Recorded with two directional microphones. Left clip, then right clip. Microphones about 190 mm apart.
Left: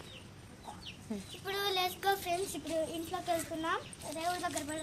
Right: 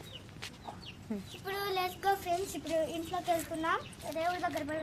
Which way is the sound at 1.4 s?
Centre (ahead or behind).